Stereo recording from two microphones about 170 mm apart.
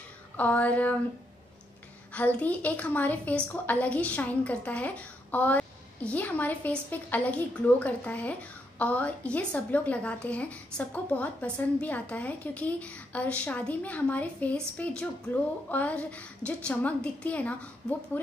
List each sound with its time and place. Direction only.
0.4 s a woman's voice: 10° left (ahead or behind)
2.1 s a woman's voice: 10° left (ahead or behind)